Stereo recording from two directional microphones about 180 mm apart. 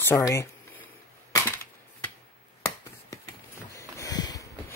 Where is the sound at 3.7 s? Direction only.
20° left (ahead or behind).